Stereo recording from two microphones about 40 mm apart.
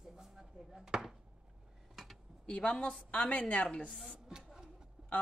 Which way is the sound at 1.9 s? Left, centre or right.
Centre.